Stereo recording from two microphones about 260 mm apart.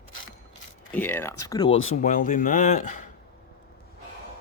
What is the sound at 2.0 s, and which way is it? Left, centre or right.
Speech, left.